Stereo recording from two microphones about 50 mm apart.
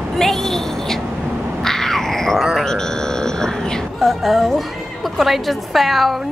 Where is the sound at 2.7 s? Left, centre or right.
Centre.